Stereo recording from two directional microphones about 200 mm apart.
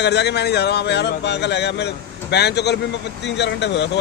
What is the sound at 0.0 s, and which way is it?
Speech, 60° left (ahead or behind).